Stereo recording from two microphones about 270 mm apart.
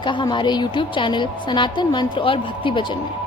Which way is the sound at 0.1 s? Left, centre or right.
Centre.